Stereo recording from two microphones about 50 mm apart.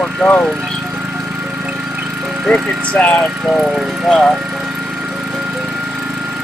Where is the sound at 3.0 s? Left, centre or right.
Left.